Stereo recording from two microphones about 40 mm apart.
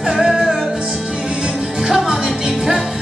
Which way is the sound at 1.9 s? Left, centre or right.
Centre.